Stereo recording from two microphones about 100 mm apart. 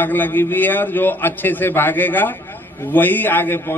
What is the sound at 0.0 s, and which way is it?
A man's voice, 20° left (ahead or behind).